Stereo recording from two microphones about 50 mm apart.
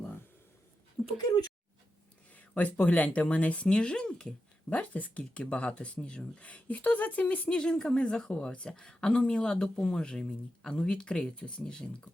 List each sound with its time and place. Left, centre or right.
2.3 s speech: left; by 4.4 s centre
4.7 s speech: left; by 12.0 s centre